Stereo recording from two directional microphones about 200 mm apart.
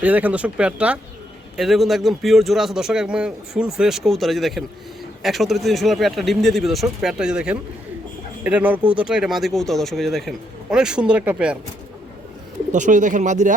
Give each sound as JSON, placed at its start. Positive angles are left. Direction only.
{"t": 0.0, "sound": "speech", "side_deg": -5}
{"t": 12.7, "sound": "speech", "side_deg": -40}